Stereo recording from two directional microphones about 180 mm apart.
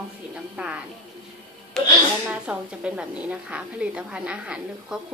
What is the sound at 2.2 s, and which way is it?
A woman's voice, 5° right (ahead or behind).